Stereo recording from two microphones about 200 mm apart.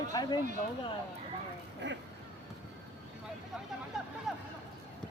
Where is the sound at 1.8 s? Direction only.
60° right (ahead or behind).